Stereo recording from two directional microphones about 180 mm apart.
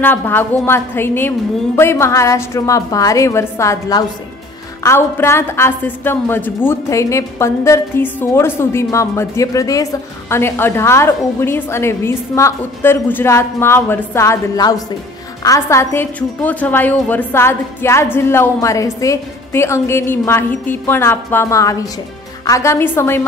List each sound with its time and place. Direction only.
0.0 s a woman's voice: 10° left (ahead or behind)